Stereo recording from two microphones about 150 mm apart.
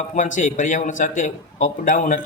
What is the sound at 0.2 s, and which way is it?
A man's voice, 55° left (ahead or behind).